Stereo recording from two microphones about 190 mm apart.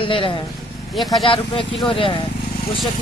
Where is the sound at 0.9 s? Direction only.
Centre (ahead or behind).